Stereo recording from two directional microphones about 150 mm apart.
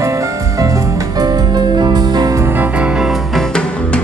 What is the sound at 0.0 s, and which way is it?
Music, 20° right (ahead or behind).